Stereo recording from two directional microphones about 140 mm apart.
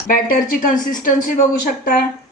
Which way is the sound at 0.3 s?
85° left.